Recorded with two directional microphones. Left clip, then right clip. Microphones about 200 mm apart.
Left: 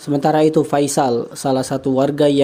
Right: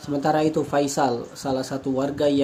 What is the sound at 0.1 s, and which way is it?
Speech, 40° left (ahead or behind).